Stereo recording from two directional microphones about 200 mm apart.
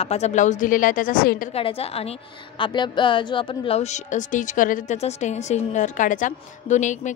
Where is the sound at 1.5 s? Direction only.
30° left (ahead or behind).